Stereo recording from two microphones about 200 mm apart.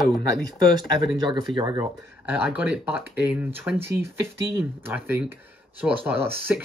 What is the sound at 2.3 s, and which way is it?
Speech, 10° right (ahead or behind).